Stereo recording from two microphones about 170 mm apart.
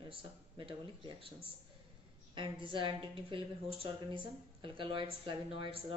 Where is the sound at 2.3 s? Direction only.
30° right (ahead or behind).